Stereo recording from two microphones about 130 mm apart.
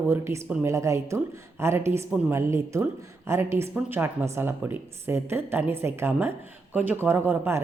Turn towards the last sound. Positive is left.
turn(degrees=-15)  # may be behind; listen again after turning